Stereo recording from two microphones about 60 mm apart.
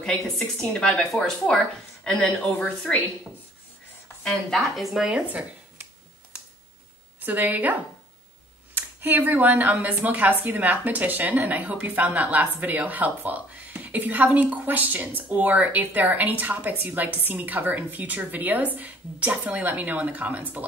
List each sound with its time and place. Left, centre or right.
0.4 s a woman's voice: centre
4.2 s speech: centre
4.9 s speech: centre
5.3 s a sound: right
7.2 s a woman's voice: right
8.7 s speech: right